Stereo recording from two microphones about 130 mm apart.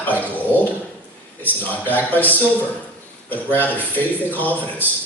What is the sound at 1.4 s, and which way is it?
A man's voice, 15° left (ahead or behind).